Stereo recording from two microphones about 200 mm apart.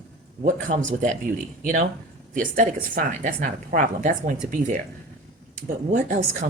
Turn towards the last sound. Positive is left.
turn(degrees=-40)  # may be behind; listen again after turning